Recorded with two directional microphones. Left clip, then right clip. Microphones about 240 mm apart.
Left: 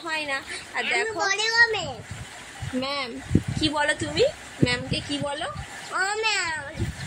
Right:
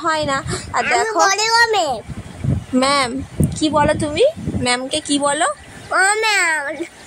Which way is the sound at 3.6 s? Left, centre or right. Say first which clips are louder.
Right 9 dB; right.